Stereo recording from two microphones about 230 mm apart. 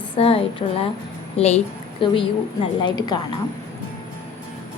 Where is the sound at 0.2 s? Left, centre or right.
Left.